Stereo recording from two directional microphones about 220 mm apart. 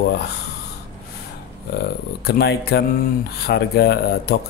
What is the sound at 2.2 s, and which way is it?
Speech, 45° left (ahead or behind).